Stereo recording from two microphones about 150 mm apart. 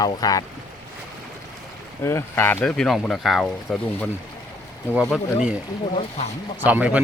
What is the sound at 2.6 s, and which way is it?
Speech, 5° left (ahead or behind).